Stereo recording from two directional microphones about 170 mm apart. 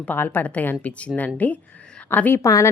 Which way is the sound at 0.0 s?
10° left (ahead or behind).